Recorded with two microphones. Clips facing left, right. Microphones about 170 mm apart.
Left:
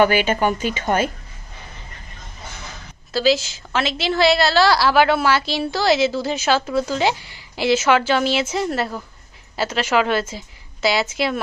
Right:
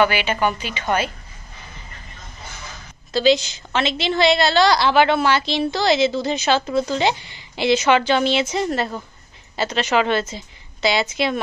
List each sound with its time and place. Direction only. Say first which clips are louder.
0.0 s a woman's voice: left 2 dB; 45° left (ahead or behind)
3.1 s a woman's voice: right 1 dB; 5° left (ahead or behind)